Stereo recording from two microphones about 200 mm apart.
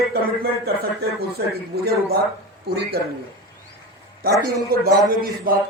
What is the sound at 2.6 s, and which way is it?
Speech, 50° right (ahead or behind).